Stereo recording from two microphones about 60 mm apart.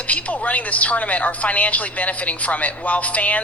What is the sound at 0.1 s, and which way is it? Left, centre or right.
A woman's voice, left.